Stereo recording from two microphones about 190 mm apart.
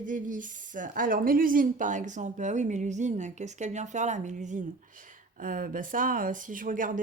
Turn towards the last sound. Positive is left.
turn(degrees=-45)  # may be behind; listen again after turning